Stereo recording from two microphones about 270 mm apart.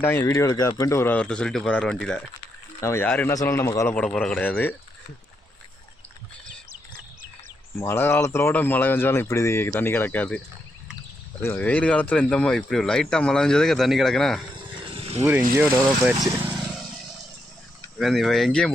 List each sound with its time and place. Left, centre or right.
0.0 s speech: centre
7.8 s speech: centre
11.4 s speech: centre
14.8 s vehicle: right
15.2 s speech: centre
16.2 s vehicle: centre
18.0 s speech: centre